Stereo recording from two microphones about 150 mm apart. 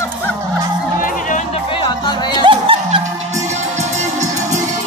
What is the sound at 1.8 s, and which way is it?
Music, 30° left (ahead or behind).